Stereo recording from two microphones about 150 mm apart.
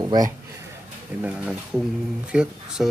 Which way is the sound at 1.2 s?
5° right (ahead or behind).